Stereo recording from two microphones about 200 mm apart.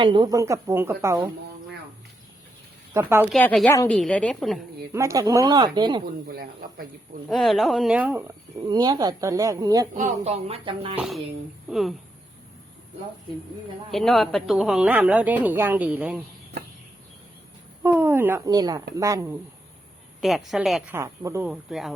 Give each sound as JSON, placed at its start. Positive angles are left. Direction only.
{"t": 0.0, "sound": "speech", "side_deg": -25}
{"t": 2.9, "sound": "speech", "side_deg": -10}
{"t": 3.2, "sound": "a woman's voice", "side_deg": 5}
{"t": 4.9, "sound": "speech", "side_deg": -15}
{"t": 6.2, "sound": "speech", "side_deg": -50}
{"t": 7.3, "sound": "speech", "side_deg": 0}
{"t": 9.9, "sound": "speech", "side_deg": -35}
{"t": 10.9, "sound": "a woman's voice", "side_deg": -5}
{"t": 13.9, "sound": "speech", "side_deg": 0}
{"t": 17.8, "sound": "speech", "side_deg": -10}
{"t": 20.2, "sound": "a woman's voice", "side_deg": 0}
{"t": 20.9, "sound": "speech", "side_deg": -15}
{"t": 21.5, "sound": "a woman's voice", "side_deg": 0}